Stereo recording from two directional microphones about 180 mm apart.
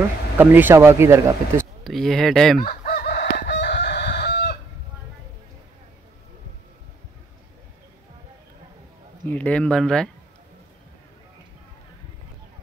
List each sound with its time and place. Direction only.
0.4 s speech: 10° right (ahead or behind)
1.9 s speech: centre (ahead or behind)
2.6 s chicken: 50° left (ahead or behind); by 4.6 s 65° left (ahead or behind)
9.2 s speech: 10° left (ahead or behind)